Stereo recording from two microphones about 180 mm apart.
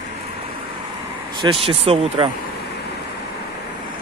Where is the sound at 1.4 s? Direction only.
30° right (ahead or behind).